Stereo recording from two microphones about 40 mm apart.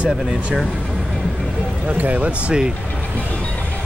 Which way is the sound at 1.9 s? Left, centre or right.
Right.